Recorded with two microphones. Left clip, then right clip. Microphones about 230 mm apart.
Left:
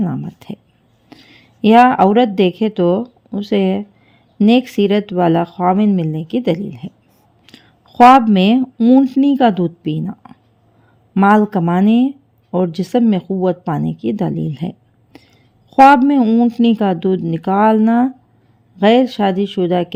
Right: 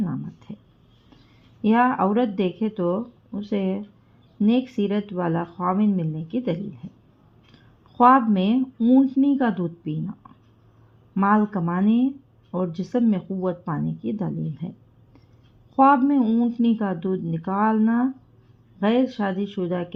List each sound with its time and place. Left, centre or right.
0.0 s whispering: left
1.6 s speech: left
8.0 s speech: left
15.7 s speech: left